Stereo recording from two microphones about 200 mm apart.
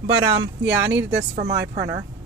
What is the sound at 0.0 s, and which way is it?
Speech, 30° right (ahead or behind).